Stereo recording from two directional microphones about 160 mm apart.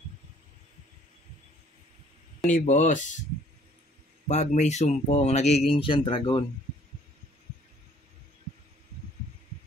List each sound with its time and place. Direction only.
2.5 s speech: 50° left (ahead or behind)
4.3 s speech: 45° left (ahead or behind); by 6.4 s 30° left (ahead or behind)